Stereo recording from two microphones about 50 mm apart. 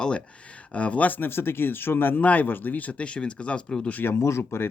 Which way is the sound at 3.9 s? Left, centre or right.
Left.